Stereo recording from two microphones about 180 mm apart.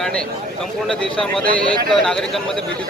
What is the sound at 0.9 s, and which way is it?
A man's voice, 5° left (ahead or behind).